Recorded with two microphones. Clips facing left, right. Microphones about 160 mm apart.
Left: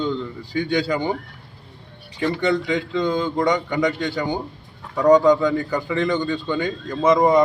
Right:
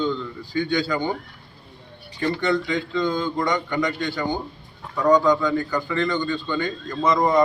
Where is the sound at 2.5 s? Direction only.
15° left (ahead or behind).